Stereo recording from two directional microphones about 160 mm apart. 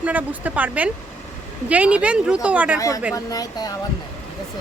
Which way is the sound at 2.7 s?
20° left (ahead or behind).